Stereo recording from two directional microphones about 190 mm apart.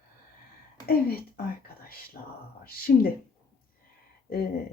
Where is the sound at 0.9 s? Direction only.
55° left (ahead or behind).